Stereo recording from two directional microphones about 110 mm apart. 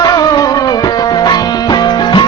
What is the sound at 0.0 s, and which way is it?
Music, 35° left (ahead or behind).